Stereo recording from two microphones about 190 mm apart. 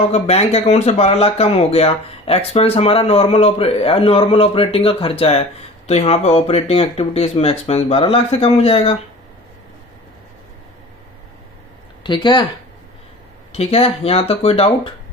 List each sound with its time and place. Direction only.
0.1 s speech: 35° left (ahead or behind)
12.0 s speech: 25° left (ahead or behind)
13.5 s speech: 30° left (ahead or behind)